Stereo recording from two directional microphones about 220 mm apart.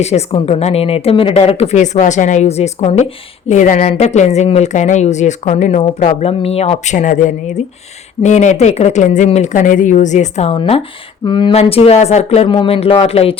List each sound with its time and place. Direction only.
0.0 s a woman's voice: 30° left (ahead or behind)